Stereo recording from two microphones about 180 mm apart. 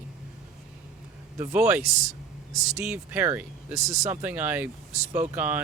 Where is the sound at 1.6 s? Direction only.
5° right (ahead or behind).